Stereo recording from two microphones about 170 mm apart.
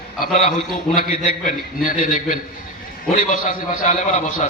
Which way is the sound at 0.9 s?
55° left (ahead or behind).